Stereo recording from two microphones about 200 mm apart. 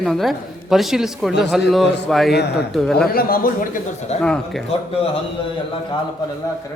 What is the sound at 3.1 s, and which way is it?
Speech, 45° left (ahead or behind).